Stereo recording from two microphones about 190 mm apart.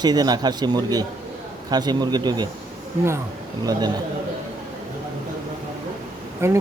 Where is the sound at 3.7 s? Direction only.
20° right (ahead or behind).